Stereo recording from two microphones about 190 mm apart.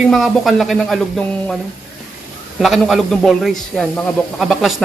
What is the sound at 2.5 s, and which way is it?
A man's voice, centre (ahead or behind).